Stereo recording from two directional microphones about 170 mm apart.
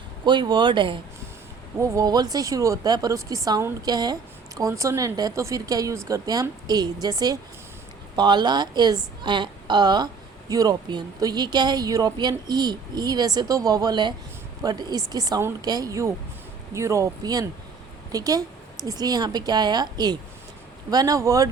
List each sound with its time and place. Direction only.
0.3 s a woman's voice: 25° right (ahead or behind)